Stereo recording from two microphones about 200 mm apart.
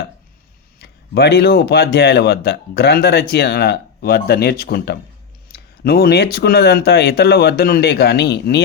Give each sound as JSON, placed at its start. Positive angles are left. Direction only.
{"t": 0.8, "sound": "speech", "side_deg": 55}